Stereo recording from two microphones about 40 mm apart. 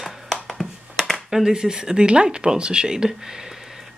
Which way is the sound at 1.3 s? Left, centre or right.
Centre.